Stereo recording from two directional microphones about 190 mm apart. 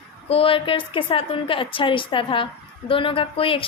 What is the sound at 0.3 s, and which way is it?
A woman's voice, 30° left (ahead or behind).